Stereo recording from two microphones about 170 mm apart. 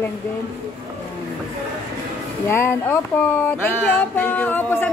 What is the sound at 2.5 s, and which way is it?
Speech, 15° left (ahead or behind).